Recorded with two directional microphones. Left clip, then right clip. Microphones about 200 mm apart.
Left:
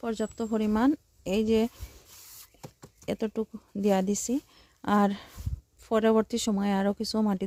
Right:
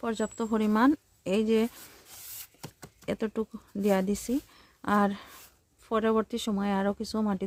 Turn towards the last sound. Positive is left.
turn(degrees=15)  # may be behind; listen again after turning